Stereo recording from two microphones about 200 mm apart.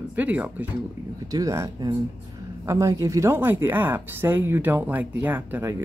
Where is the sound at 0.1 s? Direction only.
10° right (ahead or behind).